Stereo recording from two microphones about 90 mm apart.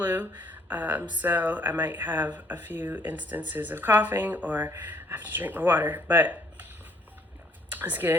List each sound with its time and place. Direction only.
0.0 s speech: 20° right (ahead or behind)
7.7 s speech: 20° right (ahead or behind)